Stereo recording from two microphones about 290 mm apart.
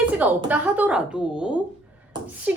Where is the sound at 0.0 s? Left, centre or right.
Centre.